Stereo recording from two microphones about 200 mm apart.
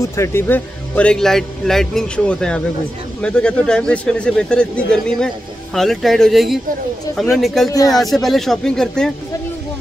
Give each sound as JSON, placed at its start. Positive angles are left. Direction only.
{"t": 0.0, "sound": "speech", "side_deg": 15}
{"t": 7.7, "sound": "speech", "side_deg": 15}
{"t": 8.0, "sound": "speech", "side_deg": 0}